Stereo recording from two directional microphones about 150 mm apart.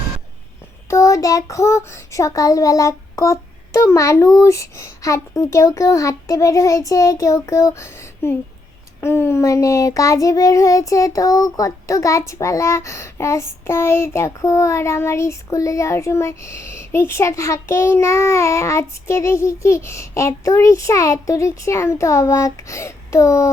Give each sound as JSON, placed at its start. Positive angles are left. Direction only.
{"t": 0.9, "sound": "child singing", "side_deg": 20}